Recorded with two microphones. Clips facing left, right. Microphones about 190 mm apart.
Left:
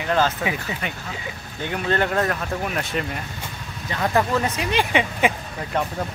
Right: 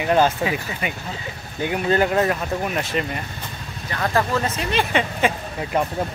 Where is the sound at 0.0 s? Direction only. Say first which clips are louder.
Right 3 dB; 15° right (ahead or behind); by 3.1 s centre (ahead or behind).